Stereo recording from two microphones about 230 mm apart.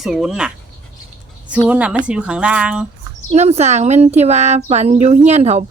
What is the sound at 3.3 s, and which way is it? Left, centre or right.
Speech, right.